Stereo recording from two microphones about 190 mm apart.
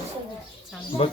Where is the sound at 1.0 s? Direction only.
30° left (ahead or behind).